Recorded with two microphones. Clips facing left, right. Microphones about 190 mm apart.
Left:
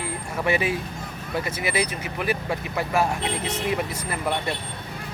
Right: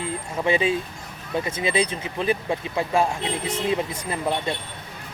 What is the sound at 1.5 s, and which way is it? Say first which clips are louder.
Speech: right 3 dB; 25° right (ahead or behind).